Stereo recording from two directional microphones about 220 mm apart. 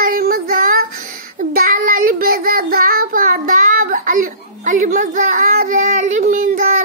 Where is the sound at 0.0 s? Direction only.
40° right (ahead or behind).